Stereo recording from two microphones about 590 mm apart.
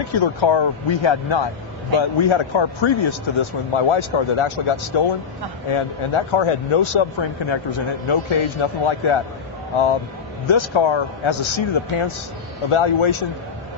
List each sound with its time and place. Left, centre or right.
0.0 s a man's voice: left
10.4 s a man's voice: left